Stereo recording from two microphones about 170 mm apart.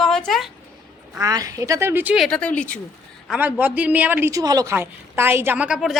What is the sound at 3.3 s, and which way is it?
A woman's voice, 10° right (ahead or behind).